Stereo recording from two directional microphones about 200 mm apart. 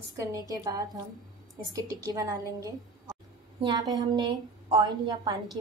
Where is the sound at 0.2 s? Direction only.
15° right (ahead or behind).